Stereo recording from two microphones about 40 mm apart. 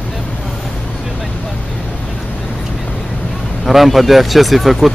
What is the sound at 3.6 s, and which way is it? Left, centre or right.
Speech, centre.